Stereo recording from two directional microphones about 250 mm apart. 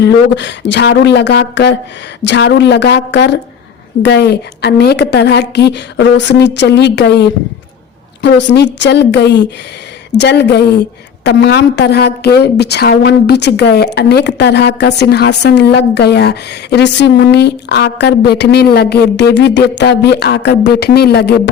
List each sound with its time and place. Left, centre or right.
0.0 s a woman's voice: left